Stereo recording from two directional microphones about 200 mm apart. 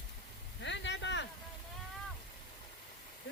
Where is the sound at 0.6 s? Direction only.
65° left (ahead or behind).